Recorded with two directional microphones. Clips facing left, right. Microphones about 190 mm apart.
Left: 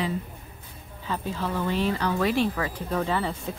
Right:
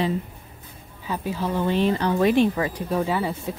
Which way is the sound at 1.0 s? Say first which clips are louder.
Right 3 dB; 10° right (ahead or behind).